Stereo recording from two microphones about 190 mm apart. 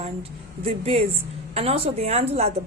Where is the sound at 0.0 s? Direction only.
30° right (ahead or behind).